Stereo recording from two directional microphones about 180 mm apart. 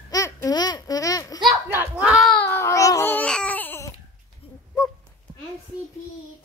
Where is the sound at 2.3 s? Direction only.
15° left (ahead or behind).